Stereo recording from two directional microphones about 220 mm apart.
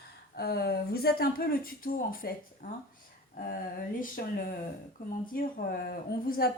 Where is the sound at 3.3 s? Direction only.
40° left (ahead or behind).